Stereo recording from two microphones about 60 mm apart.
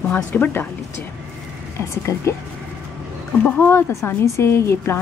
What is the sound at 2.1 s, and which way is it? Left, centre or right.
Speech, left.